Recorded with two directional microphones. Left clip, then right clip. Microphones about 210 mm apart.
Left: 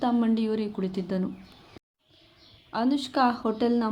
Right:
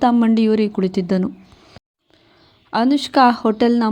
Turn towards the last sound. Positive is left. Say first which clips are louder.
# right 9 dB
turn(degrees=-35)  # may be behind; listen again after turning